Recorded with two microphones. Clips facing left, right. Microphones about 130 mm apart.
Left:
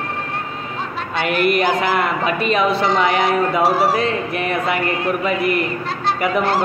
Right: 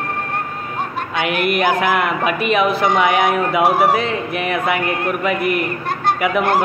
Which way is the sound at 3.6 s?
55° right (ahead or behind).